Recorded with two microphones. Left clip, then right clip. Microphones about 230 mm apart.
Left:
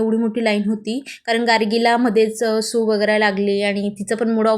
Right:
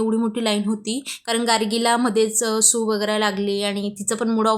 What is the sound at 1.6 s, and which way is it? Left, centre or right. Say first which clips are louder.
Speech: left 4 dB; right.